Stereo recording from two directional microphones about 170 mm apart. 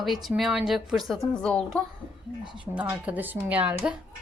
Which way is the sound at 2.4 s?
30° left (ahead or behind).